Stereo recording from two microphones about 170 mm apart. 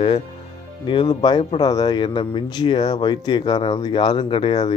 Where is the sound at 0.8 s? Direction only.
25° left (ahead or behind).